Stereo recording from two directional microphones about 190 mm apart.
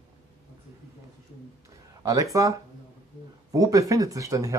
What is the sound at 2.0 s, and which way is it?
Speech, 15° right (ahead or behind).